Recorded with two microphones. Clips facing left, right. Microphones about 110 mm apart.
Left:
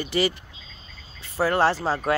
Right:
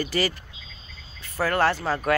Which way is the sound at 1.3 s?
30° left (ahead or behind).